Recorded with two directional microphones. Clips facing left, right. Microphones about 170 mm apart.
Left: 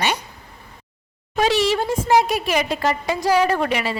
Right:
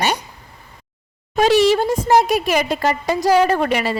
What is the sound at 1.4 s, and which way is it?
A woman's voice, 40° right (ahead or behind).